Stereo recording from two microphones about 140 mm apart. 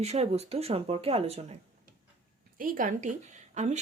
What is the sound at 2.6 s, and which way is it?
A woman's voice, 75° right (ahead or behind).